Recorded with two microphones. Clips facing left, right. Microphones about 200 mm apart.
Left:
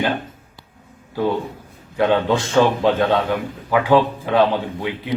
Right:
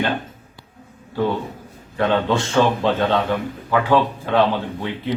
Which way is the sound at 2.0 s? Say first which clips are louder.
Left 2 dB; 10° left (ahead or behind).